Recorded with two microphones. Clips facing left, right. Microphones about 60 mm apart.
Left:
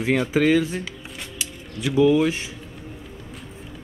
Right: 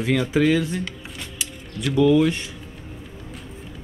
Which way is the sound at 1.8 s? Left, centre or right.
Centre.